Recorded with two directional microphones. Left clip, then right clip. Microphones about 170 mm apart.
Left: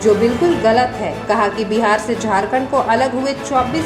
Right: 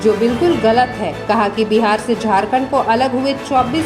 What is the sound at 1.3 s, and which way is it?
A woman's voice, 35° right (ahead or behind).